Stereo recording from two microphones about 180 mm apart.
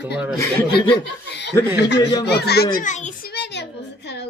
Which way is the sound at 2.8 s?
40° left (ahead or behind).